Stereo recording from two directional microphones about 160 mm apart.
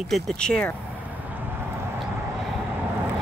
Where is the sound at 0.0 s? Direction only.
Centre (ahead or behind).